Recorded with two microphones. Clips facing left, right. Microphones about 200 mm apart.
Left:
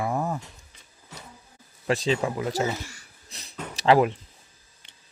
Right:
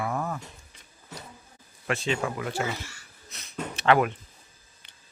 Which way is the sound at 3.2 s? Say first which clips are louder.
Right 3 dB; 35° left (ahead or behind).